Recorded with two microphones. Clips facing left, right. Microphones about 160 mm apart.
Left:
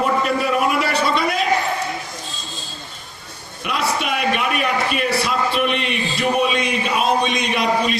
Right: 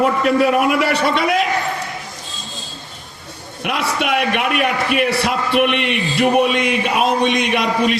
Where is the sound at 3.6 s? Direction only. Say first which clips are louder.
Right 2 dB; 60° right (ahead or behind).